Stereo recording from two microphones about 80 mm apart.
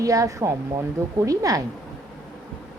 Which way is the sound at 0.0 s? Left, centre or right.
Right.